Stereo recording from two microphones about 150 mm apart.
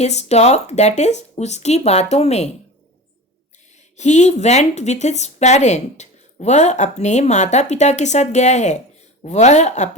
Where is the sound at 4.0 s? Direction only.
50° left (ahead or behind).